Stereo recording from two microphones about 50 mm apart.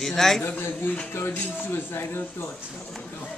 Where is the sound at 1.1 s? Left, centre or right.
Left.